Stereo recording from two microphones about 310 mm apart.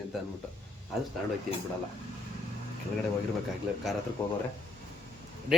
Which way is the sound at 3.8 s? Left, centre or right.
Centre.